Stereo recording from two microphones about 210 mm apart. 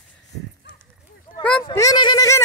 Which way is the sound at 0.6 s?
55° left (ahead or behind).